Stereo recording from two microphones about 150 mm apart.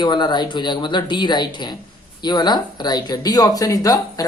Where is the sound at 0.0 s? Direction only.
30° left (ahead or behind).